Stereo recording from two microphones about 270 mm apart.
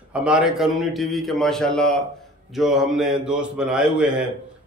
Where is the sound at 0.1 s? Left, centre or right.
Centre.